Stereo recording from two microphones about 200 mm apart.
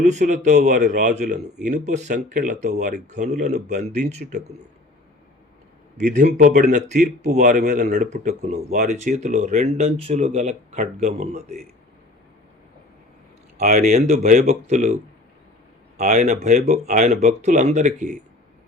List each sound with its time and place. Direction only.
0.0 s speech: 35° right (ahead or behind)
6.0 s speech: 40° right (ahead or behind)
13.6 s speech: 45° right (ahead or behind)
16.0 s speech: 35° right (ahead or behind)